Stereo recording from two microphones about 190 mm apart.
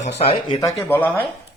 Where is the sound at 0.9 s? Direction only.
10° left (ahead or behind).